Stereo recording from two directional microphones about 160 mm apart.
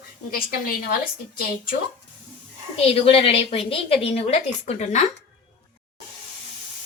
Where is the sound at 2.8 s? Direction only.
35° left (ahead or behind).